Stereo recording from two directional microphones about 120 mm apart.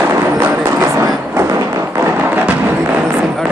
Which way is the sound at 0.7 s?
25° right (ahead or behind).